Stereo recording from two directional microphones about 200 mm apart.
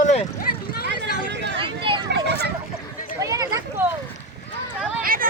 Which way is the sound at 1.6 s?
25° right (ahead or behind).